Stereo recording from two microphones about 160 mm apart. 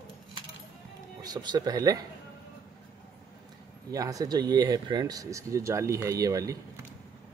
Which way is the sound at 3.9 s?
20° right (ahead or behind).